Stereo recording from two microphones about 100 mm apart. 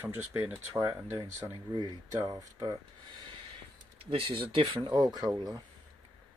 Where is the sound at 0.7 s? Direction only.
30° right (ahead or behind).